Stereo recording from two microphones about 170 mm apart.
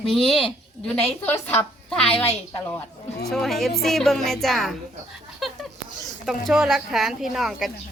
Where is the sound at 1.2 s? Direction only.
15° left (ahead or behind).